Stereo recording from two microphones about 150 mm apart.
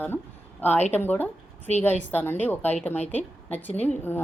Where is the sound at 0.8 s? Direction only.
50° left (ahead or behind).